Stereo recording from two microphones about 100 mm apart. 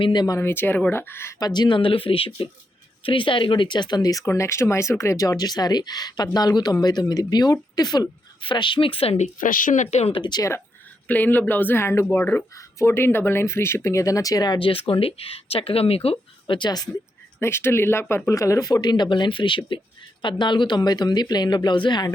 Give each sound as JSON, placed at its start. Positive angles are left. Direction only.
{"t": 0.0, "sound": "speech", "side_deg": 45}
{"t": 0.3, "sound": "speech", "side_deg": 20}
{"t": 1.4, "sound": "speech", "side_deg": 45}
{"t": 8.4, "sound": "speech", "side_deg": 55}
{"t": 10.2, "sound": "speech", "side_deg": 45}
{"t": 11.1, "sound": "speech", "side_deg": 20}
{"t": 14.6, "sound": "speech", "side_deg": 65}
{"t": 16.6, "sound": "speech", "side_deg": 45}
{"t": 17.4, "sound": "speech", "side_deg": 25}